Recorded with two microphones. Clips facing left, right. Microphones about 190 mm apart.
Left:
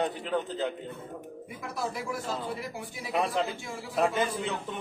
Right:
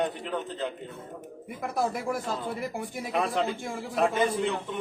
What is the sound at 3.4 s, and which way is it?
Speech, 50° right (ahead or behind).